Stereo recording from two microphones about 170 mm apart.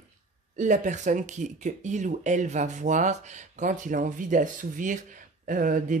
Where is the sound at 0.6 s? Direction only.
45° right (ahead or behind).